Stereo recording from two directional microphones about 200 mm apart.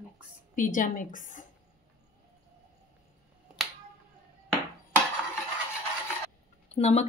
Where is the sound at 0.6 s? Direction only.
40° left (ahead or behind).